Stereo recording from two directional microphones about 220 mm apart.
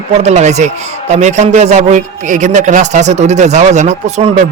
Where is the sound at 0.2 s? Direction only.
30° right (ahead or behind).